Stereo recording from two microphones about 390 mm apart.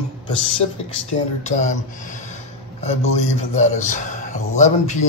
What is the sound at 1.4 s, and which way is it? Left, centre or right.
A man's voice, centre.